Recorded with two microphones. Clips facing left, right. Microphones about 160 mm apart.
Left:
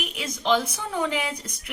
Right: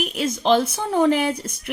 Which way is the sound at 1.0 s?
50° right (ahead or behind).